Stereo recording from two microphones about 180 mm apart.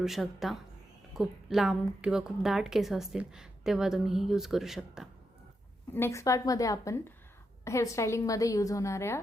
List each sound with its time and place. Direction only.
0.0 s a woman's voice: centre (ahead or behind)
5.9 s speech: 15° left (ahead or behind)